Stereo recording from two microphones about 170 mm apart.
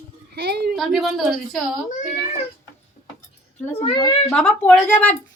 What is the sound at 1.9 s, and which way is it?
Speech, 45° left (ahead or behind).